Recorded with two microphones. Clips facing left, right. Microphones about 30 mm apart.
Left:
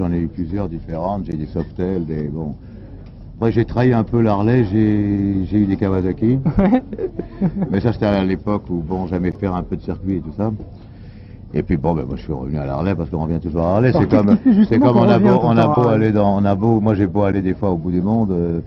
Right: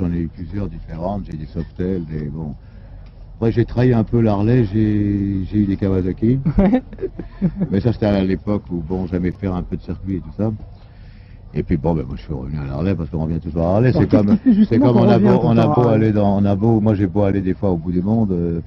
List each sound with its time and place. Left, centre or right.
0.0 s speech: centre
11.5 s speech: centre
14.4 s speech: centre